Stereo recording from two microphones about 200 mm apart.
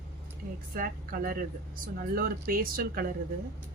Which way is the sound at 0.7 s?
45° right (ahead or behind).